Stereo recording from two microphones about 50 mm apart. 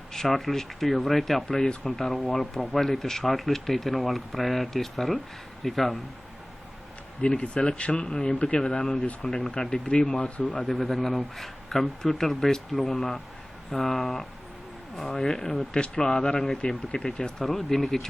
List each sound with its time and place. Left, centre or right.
0.1 s speech: centre
7.2 s speech: centre
10.6 s speech: centre
17.4 s speech: centre